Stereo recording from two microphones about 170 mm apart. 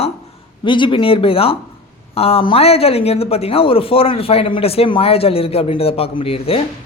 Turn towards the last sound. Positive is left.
turn(degrees=35)  # may be behind; listen again after turning